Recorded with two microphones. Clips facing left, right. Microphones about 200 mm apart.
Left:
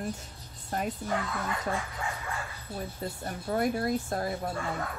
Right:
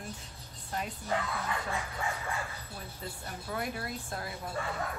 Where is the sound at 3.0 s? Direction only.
40° left (ahead or behind).